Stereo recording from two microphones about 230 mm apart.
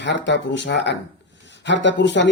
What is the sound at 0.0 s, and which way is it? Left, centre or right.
Speech, left.